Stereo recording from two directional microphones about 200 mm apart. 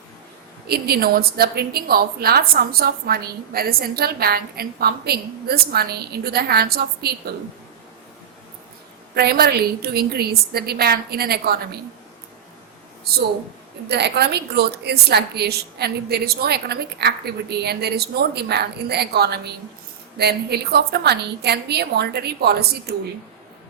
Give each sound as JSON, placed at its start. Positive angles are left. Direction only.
{"t": 0.7, "sound": "a woman's voice", "side_deg": -50}
{"t": 9.1, "sound": "a woman's voice", "side_deg": -50}
{"t": 13.8, "sound": "a woman's voice", "side_deg": -55}